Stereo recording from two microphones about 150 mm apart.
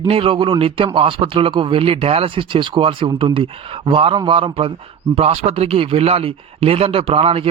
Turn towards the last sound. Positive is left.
turn(degrees=-40)  # may be behind; listen again after turning